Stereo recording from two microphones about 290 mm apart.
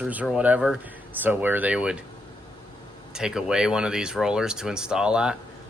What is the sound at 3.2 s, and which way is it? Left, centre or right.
Speech, centre.